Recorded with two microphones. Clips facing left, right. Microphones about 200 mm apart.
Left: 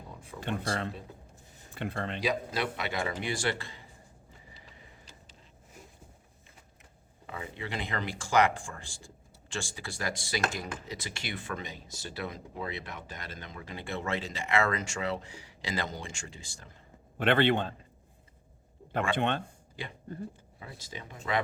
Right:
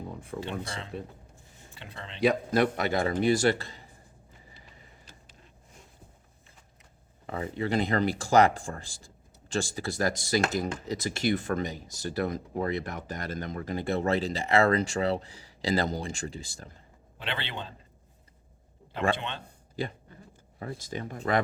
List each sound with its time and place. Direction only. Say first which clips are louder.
0.3 s a man's voice: left 3 dB; 55° left (ahead or behind)
2.2 s speech: right 9 dB; 50° right (ahead or behind)
7.3 s speech: right 9 dB; 40° right (ahead or behind)
17.2 s a man's voice: left 11 dB; 55° left (ahead or behind)
19.1 s a man's voice: left 7 dB; 55° left (ahead or behind)
20.6 s speech: right 10 dB; 50° right (ahead or behind)